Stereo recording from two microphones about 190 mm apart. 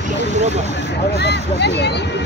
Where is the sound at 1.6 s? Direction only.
65° left (ahead or behind).